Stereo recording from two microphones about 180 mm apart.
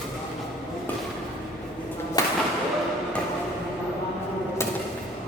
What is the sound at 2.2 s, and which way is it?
Thump, 20° left (ahead or behind).